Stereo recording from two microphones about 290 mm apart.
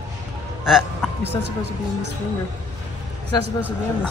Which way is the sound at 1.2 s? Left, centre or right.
Right.